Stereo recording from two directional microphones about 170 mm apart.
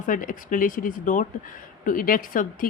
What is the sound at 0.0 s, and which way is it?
A woman's voice, 50° left (ahead or behind).